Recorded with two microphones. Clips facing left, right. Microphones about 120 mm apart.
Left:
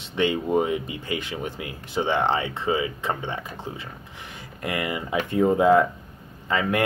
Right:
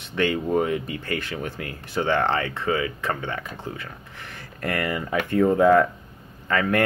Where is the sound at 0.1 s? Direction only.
20° left (ahead or behind).